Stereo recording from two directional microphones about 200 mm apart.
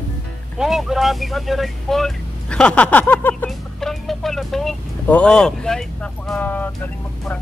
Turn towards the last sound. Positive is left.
turn(degrees=10)  # may be behind; listen again after turning